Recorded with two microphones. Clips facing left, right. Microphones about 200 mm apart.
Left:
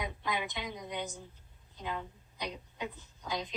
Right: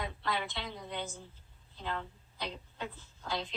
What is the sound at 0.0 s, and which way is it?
A woman's voice, 15° left (ahead or behind).